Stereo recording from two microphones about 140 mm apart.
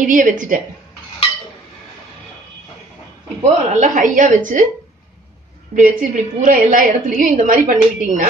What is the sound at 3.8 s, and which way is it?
Speech, 75° right (ahead or behind).